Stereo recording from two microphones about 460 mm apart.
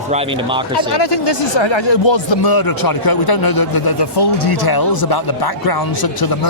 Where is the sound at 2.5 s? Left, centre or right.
Left.